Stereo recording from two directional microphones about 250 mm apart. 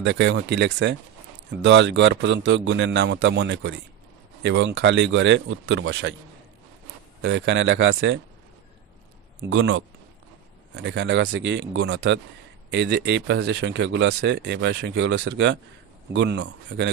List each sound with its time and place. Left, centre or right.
0.0 s speech: right
7.2 s speech: right
9.5 s speech: right